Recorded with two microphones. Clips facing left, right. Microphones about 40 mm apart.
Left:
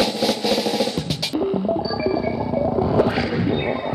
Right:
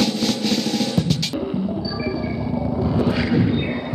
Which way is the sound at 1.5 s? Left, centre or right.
Left.